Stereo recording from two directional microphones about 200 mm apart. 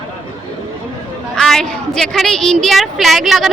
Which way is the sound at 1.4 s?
Centre (ahead or behind).